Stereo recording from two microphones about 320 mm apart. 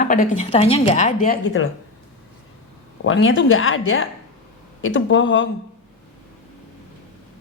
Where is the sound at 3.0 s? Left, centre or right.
Left.